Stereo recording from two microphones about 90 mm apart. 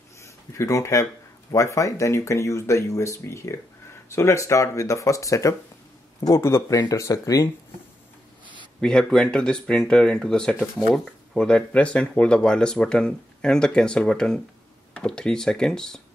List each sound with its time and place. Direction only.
0.2 s a sound: 35° left (ahead or behind)
1.5 s speech: 35° left (ahead or behind)
6.7 s speech: 40° left (ahead or behind)
8.8 s speech: 5° left (ahead or behind)